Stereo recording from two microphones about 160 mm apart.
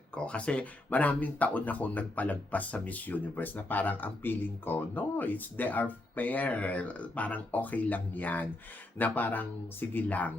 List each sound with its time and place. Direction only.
0.1 s speech: 5° left (ahead or behind)